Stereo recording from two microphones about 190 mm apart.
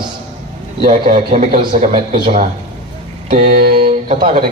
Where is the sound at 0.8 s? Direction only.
45° right (ahead or behind).